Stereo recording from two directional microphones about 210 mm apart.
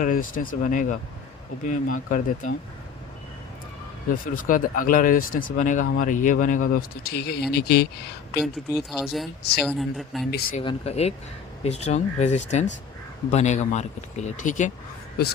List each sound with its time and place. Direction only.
0.0 s speech: 40° left (ahead or behind)
4.1 s speech: 40° left (ahead or behind)
8.4 s speech: centre (ahead or behind)
10.6 s speech: 25° left (ahead or behind)